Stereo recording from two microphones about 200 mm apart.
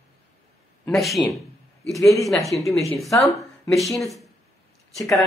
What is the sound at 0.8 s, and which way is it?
Speech, centre (ahead or behind).